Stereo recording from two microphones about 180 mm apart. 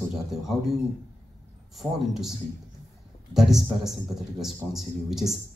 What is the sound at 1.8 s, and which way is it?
Speech, centre (ahead or behind).